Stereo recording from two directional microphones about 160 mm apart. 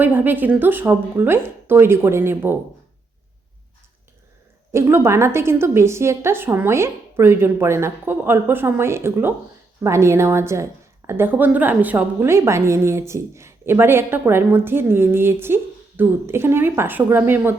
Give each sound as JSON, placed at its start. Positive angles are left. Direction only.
{"t": 0.0, "sound": "a woman's voice", "side_deg": -10}
{"t": 4.7, "sound": "a woman's voice", "side_deg": -15}